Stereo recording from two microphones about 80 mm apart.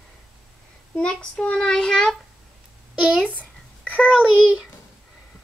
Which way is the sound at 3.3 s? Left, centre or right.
Centre.